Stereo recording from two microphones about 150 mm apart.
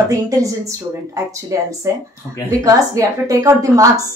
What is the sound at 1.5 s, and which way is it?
A woman's voice, 20° right (ahead or behind).